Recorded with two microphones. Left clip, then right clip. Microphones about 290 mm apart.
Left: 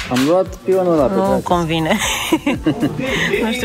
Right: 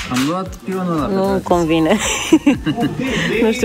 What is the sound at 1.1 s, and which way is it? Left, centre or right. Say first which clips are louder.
Speech: even; centre.